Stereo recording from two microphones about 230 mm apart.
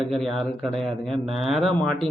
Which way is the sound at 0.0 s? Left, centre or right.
Centre.